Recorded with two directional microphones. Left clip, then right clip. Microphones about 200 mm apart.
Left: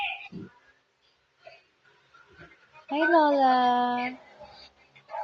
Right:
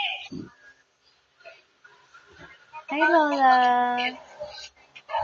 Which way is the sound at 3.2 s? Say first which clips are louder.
Right 2 dB; 20° left (ahead or behind).